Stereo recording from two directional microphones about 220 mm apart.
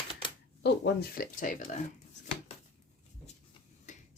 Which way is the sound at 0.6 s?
45° left (ahead or behind).